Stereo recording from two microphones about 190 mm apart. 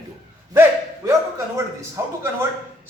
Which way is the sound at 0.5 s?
15° right (ahead or behind).